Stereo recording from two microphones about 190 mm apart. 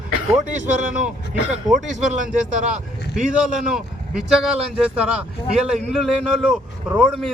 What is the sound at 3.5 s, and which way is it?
Speech, 5° right (ahead or behind).